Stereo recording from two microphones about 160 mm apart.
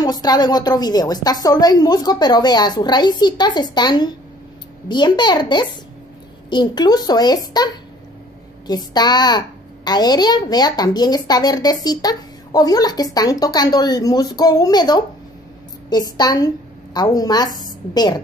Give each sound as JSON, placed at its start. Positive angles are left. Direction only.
{"t": 0.0, "sound": "a woman's voice", "side_deg": 25}